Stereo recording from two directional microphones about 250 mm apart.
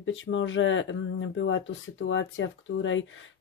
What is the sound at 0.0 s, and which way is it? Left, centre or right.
Speech, left.